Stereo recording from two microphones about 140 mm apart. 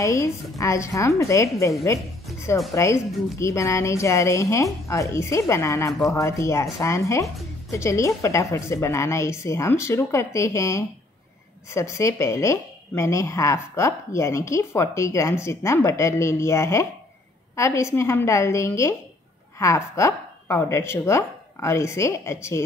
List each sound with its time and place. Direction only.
0.0 s speech: 20° left (ahead or behind)
2.3 s music: 20° left (ahead or behind)
2.7 s speech: 20° left (ahead or behind)